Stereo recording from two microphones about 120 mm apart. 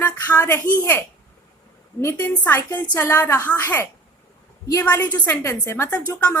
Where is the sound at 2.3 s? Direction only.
15° left (ahead or behind).